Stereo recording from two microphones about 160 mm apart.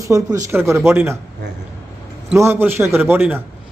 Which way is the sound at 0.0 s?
20° right (ahead or behind).